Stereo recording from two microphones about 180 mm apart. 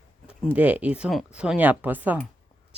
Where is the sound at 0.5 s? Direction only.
10° right (ahead or behind).